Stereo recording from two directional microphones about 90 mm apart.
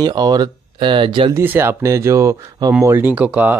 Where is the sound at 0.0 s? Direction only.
50° right (ahead or behind).